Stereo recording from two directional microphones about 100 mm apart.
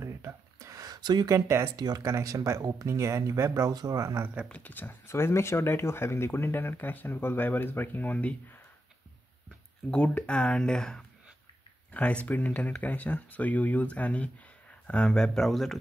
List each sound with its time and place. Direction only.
0.0 s a sound: 30° right (ahead or behind); by 1.3 s 45° right (ahead or behind)
1.3 s speech: 25° right (ahead or behind)
1.8 s speech: 40° right (ahead or behind)
4.5 s speech: 15° left (ahead or behind)
9.8 s speech: 10° left (ahead or behind)